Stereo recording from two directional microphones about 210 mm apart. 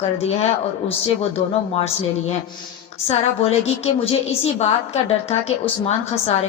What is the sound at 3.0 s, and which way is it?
A woman's voice, 30° left (ahead or behind).